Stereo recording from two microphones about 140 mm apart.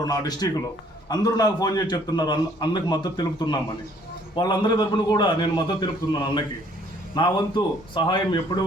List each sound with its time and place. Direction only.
0.0 s a man's voice: 25° left (ahead or behind)